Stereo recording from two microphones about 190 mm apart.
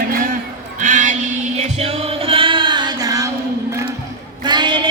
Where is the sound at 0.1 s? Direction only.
45° right (ahead or behind).